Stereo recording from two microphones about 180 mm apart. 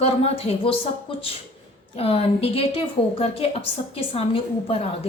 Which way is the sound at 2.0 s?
35° left (ahead or behind).